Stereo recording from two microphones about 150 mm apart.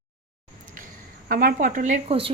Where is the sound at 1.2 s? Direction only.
85° right; by 2.2 s 50° right (ahead or behind).